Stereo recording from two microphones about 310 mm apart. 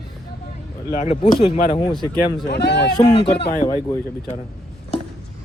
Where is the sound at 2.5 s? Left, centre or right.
Left.